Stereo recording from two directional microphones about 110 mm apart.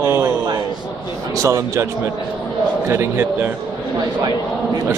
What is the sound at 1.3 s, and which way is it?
Speech, 30° right (ahead or behind).